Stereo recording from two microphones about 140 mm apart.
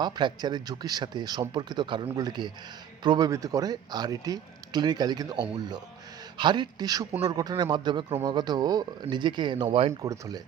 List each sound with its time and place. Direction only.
0.0 s speech: 30° right (ahead or behind)